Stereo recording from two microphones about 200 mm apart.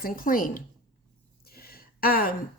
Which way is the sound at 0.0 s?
45° left (ahead or behind).